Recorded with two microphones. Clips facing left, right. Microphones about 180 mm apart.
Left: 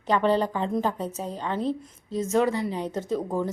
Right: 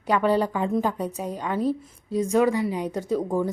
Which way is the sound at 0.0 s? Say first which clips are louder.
Right 1 dB; 10° right (ahead or behind).